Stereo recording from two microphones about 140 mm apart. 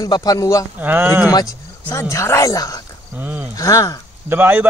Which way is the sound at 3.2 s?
10° right (ahead or behind).